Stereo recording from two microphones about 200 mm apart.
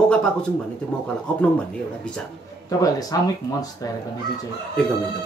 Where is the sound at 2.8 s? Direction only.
15° left (ahead or behind).